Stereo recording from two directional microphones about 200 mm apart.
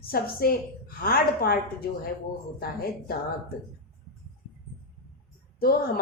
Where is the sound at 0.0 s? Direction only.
50° left (ahead or behind).